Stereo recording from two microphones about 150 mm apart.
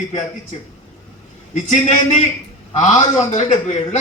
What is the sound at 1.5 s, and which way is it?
A man's voice, 50° left (ahead or behind).